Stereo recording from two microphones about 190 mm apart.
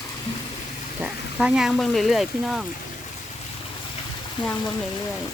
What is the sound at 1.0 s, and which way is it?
Speech, 5° right (ahead or behind).